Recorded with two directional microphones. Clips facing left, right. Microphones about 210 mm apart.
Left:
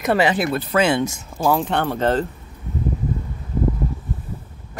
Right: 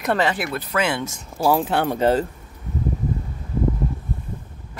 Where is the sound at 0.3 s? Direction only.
25° left (ahead or behind).